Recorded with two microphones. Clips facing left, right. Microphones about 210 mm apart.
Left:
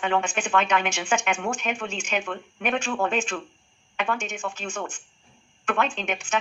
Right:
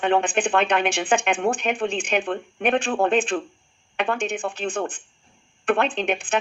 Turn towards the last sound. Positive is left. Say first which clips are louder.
# right 5 dB
turn(degrees=-35)  # may be behind; listen again after turning